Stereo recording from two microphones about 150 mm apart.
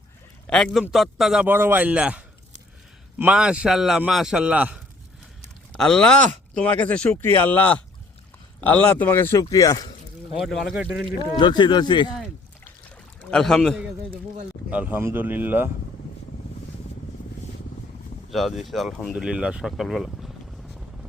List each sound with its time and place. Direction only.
0.4 s speech: 5° left (ahead or behind)
5.7 s speech: 5° left (ahead or behind); by 9.8 s 25° left (ahead or behind)
10.4 s speech: centre (ahead or behind)
11.2 s speech: 30° left (ahead or behind)
13.3 s speech: 5° left (ahead or behind); by 15.7 s 10° right (ahead or behind)
18.3 s speech: centre (ahead or behind)